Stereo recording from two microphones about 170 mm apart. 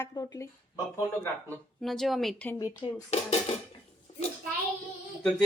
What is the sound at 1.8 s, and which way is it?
Speech, centre (ahead or behind).